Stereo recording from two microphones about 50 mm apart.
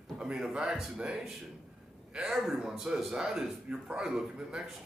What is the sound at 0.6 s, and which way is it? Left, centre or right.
Speech, centre.